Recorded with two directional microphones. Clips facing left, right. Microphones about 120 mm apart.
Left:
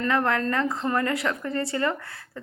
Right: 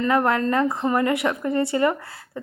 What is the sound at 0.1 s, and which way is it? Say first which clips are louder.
A woman's voice: right 4 dB; 20° right (ahead or behind).